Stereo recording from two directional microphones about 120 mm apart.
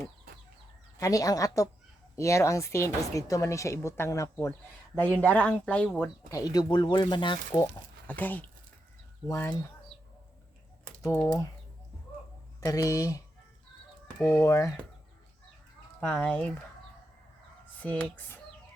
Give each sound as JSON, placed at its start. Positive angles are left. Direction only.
{"t": 0.9, "sound": "speech", "side_deg": 30}
{"t": 4.9, "sound": "speech", "side_deg": 15}
{"t": 6.3, "sound": "speech", "side_deg": 30}
{"t": 8.0, "sound": "speech", "side_deg": 15}
{"t": 9.2, "sound": "speech", "side_deg": 25}
{"t": 12.5, "sound": "speech", "side_deg": 30}
{"t": 16.0, "sound": "speech", "side_deg": 10}
{"t": 17.8, "sound": "speech", "side_deg": 15}